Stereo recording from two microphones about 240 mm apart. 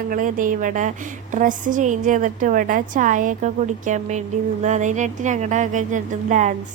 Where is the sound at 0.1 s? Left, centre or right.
Right.